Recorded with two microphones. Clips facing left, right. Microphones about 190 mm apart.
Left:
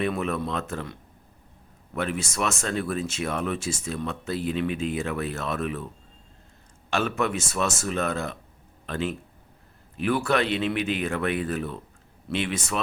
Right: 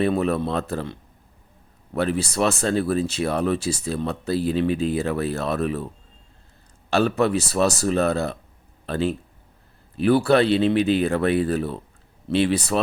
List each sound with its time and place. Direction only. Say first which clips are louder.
0.0 s speech: right 6 dB; 35° right (ahead or behind)
2.0 s speech: right 6 dB; 35° right (ahead or behind)
6.9 s speech: right 6 dB; 35° right (ahead or behind)